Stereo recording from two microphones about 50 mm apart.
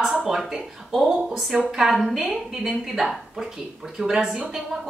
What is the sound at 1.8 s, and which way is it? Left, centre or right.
A woman's voice, centre.